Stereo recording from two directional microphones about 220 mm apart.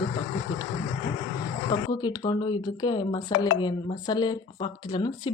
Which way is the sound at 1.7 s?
20° left (ahead or behind).